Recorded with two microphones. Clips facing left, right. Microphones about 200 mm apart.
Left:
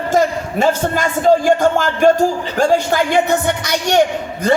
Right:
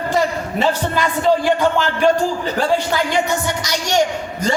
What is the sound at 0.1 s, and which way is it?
A man's voice, 45° left (ahead or behind).